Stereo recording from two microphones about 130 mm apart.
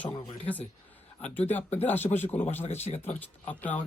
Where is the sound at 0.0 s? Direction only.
10° left (ahead or behind).